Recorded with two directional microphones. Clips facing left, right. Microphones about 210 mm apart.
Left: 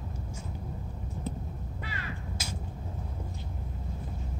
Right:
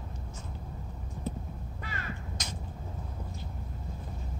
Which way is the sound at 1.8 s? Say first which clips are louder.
Even; 45° right (ahead or behind).